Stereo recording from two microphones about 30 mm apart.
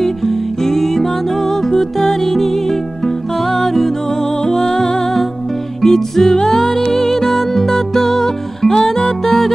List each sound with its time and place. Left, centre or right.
0.0 s music: centre
3.6 s music: centre
5.8 s music: centre